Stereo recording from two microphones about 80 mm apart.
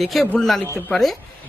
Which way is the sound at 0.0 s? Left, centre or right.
Centre.